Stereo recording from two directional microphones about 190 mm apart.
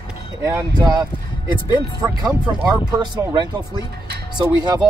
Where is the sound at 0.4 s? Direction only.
15° right (ahead or behind).